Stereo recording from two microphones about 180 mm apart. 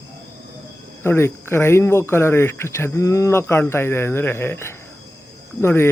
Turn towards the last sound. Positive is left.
turn(degrees=15)  # may be behind; listen again after turning